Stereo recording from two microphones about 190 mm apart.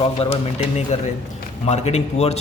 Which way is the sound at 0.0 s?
30° left (ahead or behind).